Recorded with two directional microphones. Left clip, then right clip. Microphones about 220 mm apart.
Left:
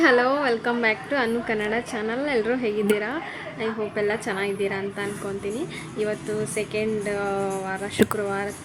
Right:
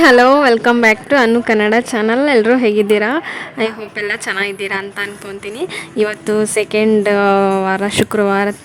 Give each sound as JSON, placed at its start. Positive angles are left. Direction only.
{"t": 0.0, "sound": "a woman's voice", "side_deg": -50}